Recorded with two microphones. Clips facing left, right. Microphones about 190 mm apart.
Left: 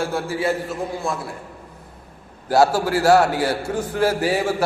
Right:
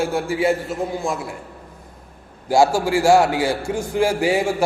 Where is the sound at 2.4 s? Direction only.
10° right (ahead or behind).